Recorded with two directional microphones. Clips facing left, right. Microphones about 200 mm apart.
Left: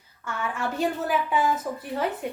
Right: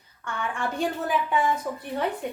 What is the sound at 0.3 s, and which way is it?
A woman's voice, 5° left (ahead or behind).